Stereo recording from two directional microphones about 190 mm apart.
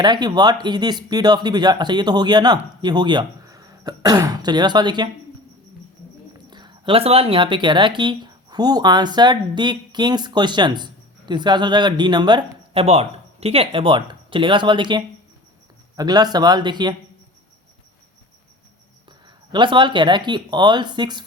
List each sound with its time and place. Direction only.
0.0 s speech: 20° right (ahead or behind)
6.5 s speech: 25° right (ahead or behind)
19.0 s speech: 25° right (ahead or behind)